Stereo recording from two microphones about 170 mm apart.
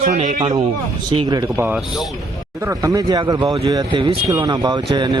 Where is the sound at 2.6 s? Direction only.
15° right (ahead or behind).